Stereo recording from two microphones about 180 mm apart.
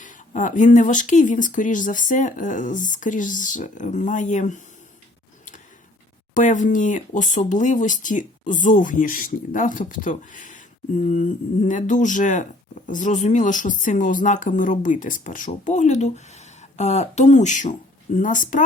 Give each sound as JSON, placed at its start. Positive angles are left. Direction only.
{"t": 0.0, "sound": "speech", "side_deg": 45}
{"t": 6.3, "sound": "speech", "side_deg": 45}